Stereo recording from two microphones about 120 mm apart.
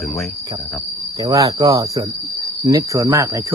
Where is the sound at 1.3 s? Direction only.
30° right (ahead or behind).